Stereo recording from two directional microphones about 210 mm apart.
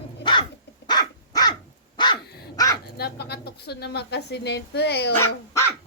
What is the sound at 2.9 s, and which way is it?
Pigeon, 50° left (ahead or behind).